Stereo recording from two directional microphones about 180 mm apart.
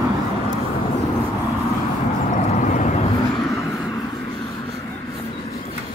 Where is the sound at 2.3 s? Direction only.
45° left (ahead or behind).